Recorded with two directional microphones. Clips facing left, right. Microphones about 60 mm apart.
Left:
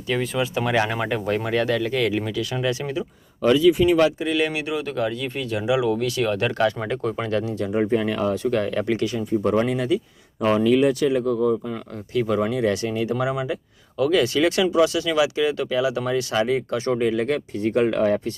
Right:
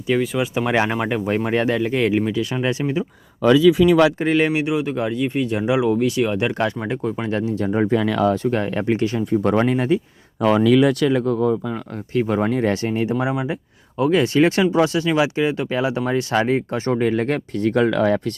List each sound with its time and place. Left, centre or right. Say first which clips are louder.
0.1 s speech: right 4 dB; centre
0.5 s speech: right 2 dB; right
1.5 s speech: right 2 dB; right
4.2 s speech: right 4 dB; right
4.4 s speech: right 5 dB; right
7.6 s speech: right 3 dB; right
8.4 s speech: right 2 dB; right
9.1 s speech: right 1 dB; right
10.5 s speech: right 3 dB; right
13.1 s speech: right 2 dB; right
17.0 s speech: right 3 dB; right
17.6 s speech: right 3 dB; right